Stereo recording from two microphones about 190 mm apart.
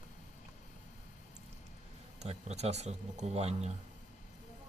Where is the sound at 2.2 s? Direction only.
35° right (ahead or behind).